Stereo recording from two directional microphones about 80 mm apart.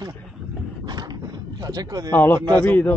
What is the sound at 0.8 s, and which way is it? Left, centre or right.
Dog, right.